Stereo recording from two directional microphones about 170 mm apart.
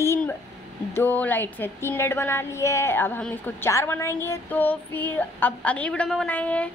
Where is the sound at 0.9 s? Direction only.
10° left (ahead or behind).